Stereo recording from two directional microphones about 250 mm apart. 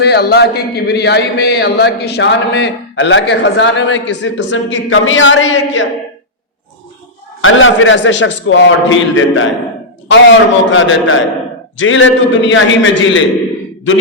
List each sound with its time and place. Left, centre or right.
0.0 s a man's voice: left
7.4 s a man's voice: left